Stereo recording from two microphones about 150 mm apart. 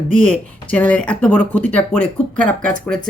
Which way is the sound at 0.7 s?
10° left (ahead or behind).